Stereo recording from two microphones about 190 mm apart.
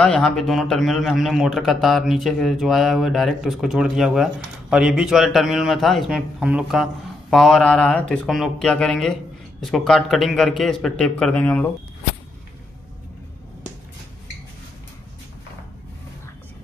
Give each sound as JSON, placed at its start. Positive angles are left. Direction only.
{"t": 0.0, "sound": "a man's voice", "side_deg": 5}